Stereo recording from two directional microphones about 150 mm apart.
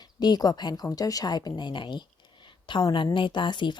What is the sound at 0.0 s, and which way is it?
A woman's voice, 25° left (ahead or behind).